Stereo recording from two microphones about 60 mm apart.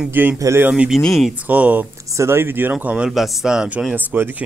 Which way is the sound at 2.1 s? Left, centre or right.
Right.